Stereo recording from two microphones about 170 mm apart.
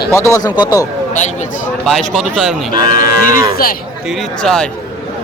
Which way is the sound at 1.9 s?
Centre (ahead or behind).